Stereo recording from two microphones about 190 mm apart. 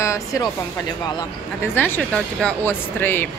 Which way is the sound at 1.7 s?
10° left (ahead or behind).